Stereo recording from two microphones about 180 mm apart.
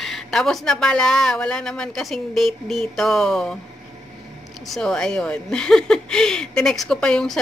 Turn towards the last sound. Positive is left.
turn(degrees=5)  # may be behind; listen again after turning